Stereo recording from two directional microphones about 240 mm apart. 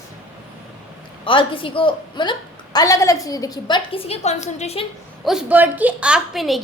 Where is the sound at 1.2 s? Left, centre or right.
Left.